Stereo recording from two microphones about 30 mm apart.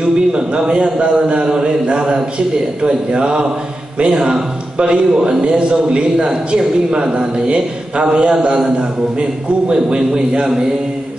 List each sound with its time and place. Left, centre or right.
0.0 s a man's voice: right
4.7 s a man's voice: right
6.1 s a man's voice: right
9.9 s a man's voice: right